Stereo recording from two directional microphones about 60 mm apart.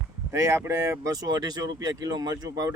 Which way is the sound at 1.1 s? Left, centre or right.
Right.